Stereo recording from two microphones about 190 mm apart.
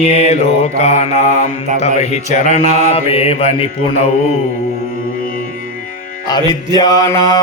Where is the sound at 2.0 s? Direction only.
40° left (ahead or behind).